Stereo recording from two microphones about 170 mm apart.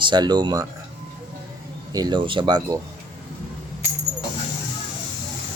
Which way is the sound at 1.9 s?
25° right (ahead or behind).